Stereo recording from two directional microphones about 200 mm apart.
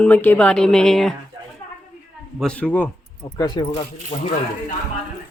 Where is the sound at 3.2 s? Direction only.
20° left (ahead or behind).